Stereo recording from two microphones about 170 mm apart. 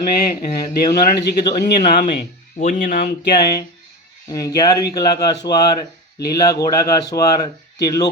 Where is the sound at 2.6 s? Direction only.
50° left (ahead or behind).